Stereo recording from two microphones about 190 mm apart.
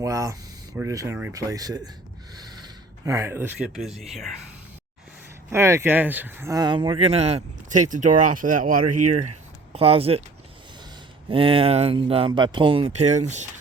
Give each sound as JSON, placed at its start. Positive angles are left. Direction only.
{"t": 0.0, "sound": "speech", "side_deg": -15}
{"t": 3.0, "sound": "speech", "side_deg": -15}
{"t": 5.5, "sound": "speech", "side_deg": -15}
{"t": 9.7, "sound": "speech", "side_deg": -30}
{"t": 11.3, "sound": "speech", "side_deg": -30}